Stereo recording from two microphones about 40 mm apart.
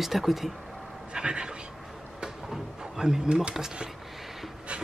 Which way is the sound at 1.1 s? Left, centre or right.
Right.